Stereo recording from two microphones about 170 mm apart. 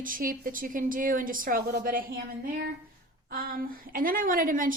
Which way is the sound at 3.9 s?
55° right (ahead or behind).